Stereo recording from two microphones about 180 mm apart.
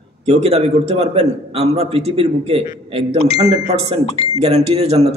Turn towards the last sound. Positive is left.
turn(degrees=-35)  # may be behind; listen again after turning